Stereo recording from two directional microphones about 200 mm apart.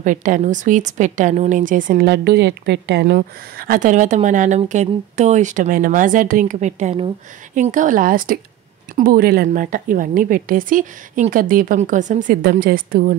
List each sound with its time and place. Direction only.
0.0 s speech: 40° right (ahead or behind)
2.0 s a woman's voice: 55° right (ahead or behind)